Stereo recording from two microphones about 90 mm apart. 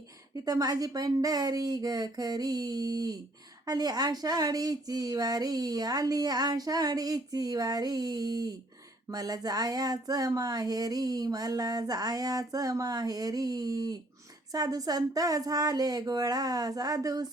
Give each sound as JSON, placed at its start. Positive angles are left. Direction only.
{"t": 0.4, "sound": "speech", "side_deg": -45}